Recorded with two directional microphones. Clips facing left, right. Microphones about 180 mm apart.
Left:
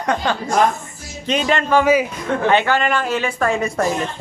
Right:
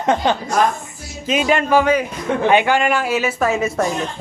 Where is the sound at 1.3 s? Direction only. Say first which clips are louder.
Right 1 dB; 10° right (ahead or behind).